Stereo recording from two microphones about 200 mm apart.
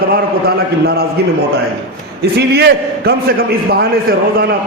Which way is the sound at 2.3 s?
55° right (ahead or behind).